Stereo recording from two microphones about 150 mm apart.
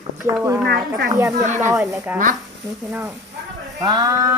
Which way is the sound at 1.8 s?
20° right (ahead or behind).